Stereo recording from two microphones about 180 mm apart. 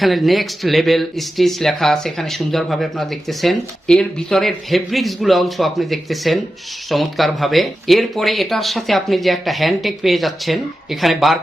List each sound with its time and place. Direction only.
0.0 s speech: centre (ahead or behind)